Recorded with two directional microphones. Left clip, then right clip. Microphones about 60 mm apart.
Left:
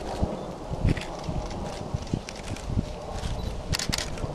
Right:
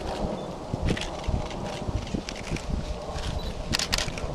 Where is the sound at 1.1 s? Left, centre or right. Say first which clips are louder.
Right 1 dB; right.